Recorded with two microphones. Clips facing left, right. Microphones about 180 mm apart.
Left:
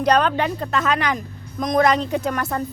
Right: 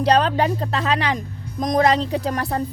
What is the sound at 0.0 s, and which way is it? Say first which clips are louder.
Speech: right 1 dB; 30° right (ahead or behind).